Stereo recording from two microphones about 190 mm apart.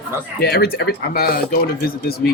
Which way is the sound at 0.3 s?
55° left (ahead or behind).